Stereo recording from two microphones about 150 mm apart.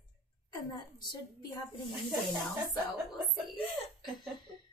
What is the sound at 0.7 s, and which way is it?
A woman's voice, 30° left (ahead or behind).